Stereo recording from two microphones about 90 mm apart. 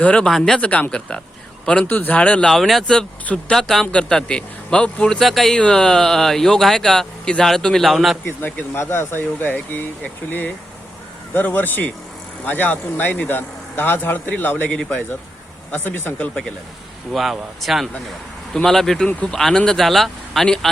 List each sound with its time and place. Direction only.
0.0 s speech: 10° left (ahead or behind)
2.5 s speech: centre (ahead or behind)
8.2 s speech: 20° left (ahead or behind)
17.1 s speech: centre (ahead or behind)